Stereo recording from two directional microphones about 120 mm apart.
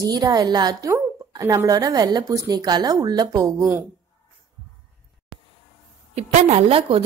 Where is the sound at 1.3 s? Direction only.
30° right (ahead or behind).